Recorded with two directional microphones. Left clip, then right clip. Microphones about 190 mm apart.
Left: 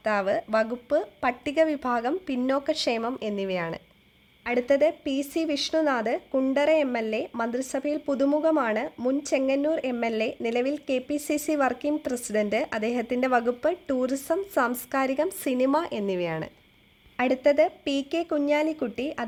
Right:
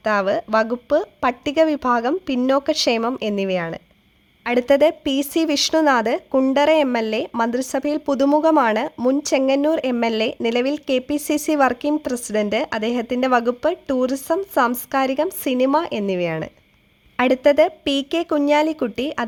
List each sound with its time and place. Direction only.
0.0 s speech: 30° right (ahead or behind)
4.4 s speech: 35° right (ahead or behind)